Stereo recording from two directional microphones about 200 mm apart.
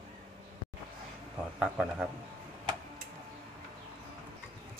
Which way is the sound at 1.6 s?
5° right (ahead or behind).